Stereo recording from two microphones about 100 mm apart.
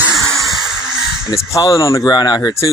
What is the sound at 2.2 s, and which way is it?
Speech, 40° left (ahead or behind).